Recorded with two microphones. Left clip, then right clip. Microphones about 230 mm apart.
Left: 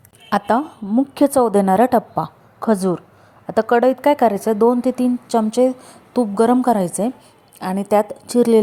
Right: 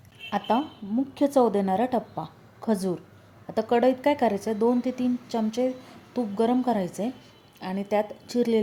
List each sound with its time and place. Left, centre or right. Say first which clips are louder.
0.3 s a woman's voice: left 8 dB; left